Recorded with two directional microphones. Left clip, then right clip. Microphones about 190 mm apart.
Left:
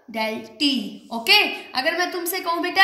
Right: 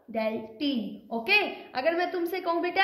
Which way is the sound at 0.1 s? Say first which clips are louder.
Left 4 dB; 40° right (ahead or behind).